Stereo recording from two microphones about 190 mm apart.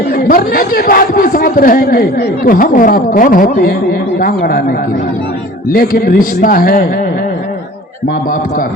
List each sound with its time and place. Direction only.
0.1 s speech: 50° left (ahead or behind)
5.7 s speech: 50° left (ahead or behind)